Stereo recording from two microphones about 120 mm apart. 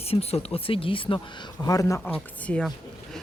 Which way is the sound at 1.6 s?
30° left (ahead or behind).